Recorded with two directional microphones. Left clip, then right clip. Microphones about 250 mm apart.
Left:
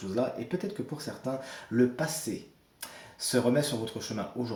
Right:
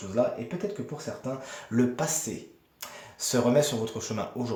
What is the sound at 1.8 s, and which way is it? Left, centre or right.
Speech, right.